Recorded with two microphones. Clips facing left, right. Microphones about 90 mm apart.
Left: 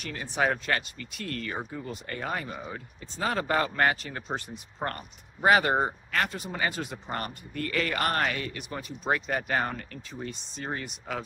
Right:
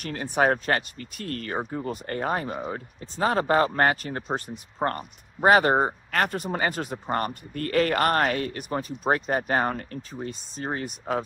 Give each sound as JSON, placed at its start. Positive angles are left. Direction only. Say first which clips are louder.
{"t": 0.0, "sound": "speech", "louder": "right 5 dB", "side_deg": -45}
{"t": 4.3, "sound": "speech", "louder": "right 4 dB", "side_deg": -30}
{"t": 6.1, "sound": "speech", "louder": "right 5 dB", "side_deg": -45}